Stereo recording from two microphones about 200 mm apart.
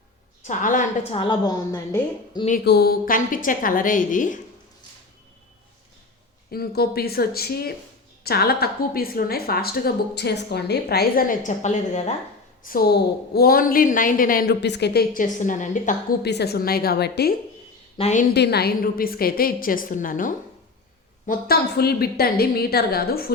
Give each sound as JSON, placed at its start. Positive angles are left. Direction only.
{"t": 0.4, "sound": "a woman's voice", "side_deg": 40}
{"t": 1.1, "sound": "a woman's voice", "side_deg": 25}
{"t": 2.6, "sound": "a woman's voice", "side_deg": 55}
{"t": 6.5, "sound": "a woman's voice", "side_deg": 50}
{"t": 12.6, "sound": "a woman's voice", "side_deg": 50}
{"t": 16.2, "sound": "a woman's voice", "side_deg": 55}
{"t": 17.9, "sound": "a woman's voice", "side_deg": 35}
{"t": 18.3, "sound": "a woman's voice", "side_deg": 55}